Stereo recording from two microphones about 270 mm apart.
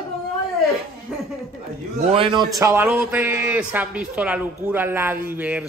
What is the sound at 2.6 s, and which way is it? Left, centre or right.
A man's voice, centre.